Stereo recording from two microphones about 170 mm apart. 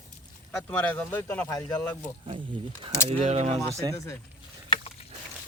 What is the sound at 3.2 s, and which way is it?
Speech, 40° right (ahead or behind).